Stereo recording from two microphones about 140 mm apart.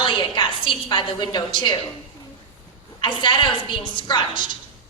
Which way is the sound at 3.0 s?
35° left (ahead or behind).